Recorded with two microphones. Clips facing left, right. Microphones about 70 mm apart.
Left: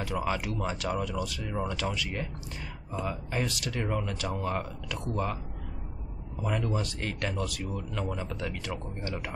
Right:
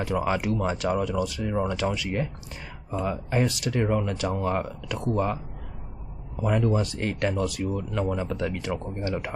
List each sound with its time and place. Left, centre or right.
0.0 s speech: right
6.4 s speech: right